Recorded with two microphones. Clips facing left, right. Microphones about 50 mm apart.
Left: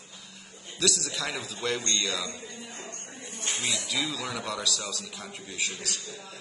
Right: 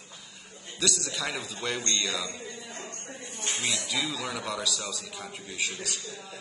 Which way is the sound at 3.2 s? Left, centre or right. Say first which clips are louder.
Even; right.